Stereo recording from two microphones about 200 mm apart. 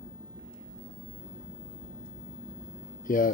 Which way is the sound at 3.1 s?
45° left (ahead or behind).